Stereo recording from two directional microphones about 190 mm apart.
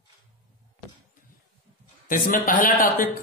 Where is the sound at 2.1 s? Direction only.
45° left (ahead or behind).